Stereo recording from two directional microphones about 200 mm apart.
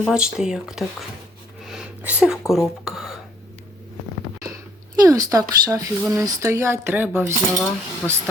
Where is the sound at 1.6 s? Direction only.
Centre (ahead or behind).